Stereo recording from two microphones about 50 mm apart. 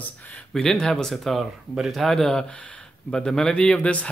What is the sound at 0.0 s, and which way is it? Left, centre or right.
Speech, left.